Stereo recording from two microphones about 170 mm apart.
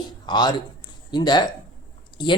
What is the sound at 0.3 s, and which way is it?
Speech, 25° left (ahead or behind).